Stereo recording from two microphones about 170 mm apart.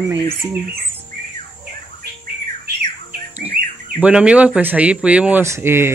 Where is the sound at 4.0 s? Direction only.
5° right (ahead or behind).